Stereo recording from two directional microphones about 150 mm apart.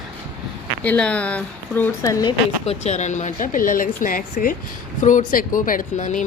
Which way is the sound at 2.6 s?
50° left (ahead or behind).